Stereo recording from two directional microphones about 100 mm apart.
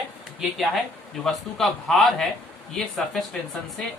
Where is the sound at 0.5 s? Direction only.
Centre (ahead or behind).